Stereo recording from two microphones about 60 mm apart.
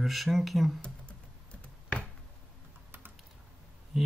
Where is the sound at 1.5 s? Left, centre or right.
Centre.